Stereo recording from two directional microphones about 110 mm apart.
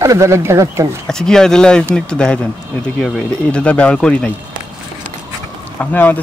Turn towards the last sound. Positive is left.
turn(degrees=15)  # may be behind; listen again after turning